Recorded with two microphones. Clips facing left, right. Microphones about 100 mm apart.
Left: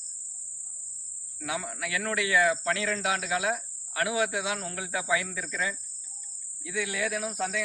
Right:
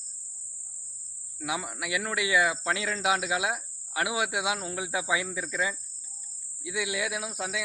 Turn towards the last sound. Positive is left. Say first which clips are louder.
# left 3 dB
turn(degrees=-10)  # may be behind; listen again after turning